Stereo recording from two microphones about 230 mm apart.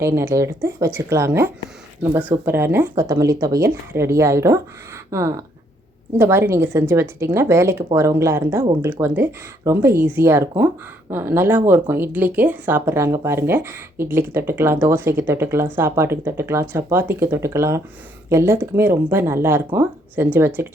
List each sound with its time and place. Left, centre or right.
0.0 s speech: centre
6.1 s speech: centre